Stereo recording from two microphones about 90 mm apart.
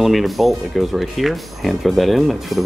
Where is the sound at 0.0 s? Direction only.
Centre (ahead or behind).